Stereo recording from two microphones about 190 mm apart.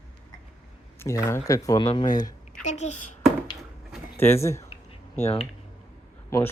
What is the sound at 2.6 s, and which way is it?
Speech, 35° left (ahead or behind).